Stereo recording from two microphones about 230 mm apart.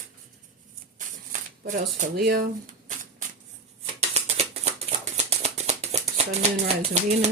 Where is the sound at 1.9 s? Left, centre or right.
Right.